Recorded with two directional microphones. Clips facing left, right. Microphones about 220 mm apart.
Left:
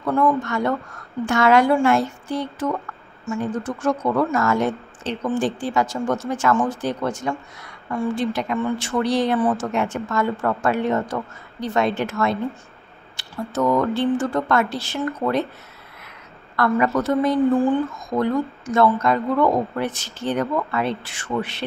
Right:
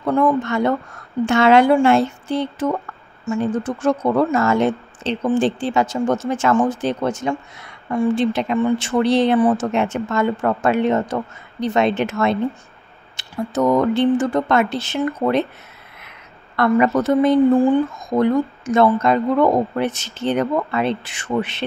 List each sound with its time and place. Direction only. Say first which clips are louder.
0.0 s speech: right 3 dB; 20° right (ahead or behind)
16.5 s speech: right 4 dB; 20° right (ahead or behind)